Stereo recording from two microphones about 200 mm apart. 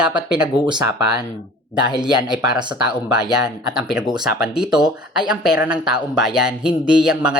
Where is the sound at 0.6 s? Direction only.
20° right (ahead or behind).